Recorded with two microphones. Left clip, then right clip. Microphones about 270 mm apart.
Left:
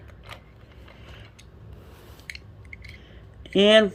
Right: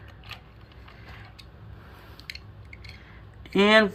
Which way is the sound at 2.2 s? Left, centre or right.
Left.